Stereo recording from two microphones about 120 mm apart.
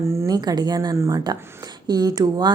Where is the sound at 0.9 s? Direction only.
20° right (ahead or behind).